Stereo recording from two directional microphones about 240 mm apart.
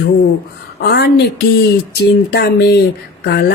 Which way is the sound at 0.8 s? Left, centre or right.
Left.